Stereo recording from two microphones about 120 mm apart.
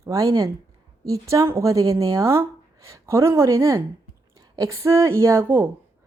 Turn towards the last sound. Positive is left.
turn(degrees=-20)  # may be behind; listen again after turning